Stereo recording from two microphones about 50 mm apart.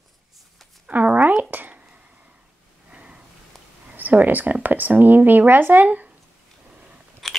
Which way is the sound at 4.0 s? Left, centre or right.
Right.